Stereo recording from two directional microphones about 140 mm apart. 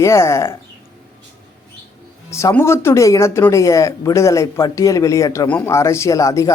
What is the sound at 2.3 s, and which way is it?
Speech, 20° left (ahead or behind).